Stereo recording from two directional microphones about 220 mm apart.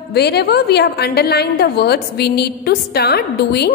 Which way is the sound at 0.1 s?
50° left (ahead or behind).